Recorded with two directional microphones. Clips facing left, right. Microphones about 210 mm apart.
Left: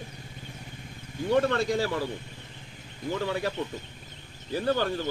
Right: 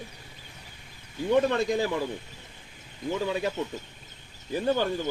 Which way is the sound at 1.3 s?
15° right (ahead or behind).